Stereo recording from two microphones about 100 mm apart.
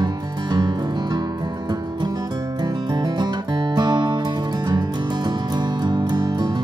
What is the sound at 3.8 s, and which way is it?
Music, 45° right (ahead or behind).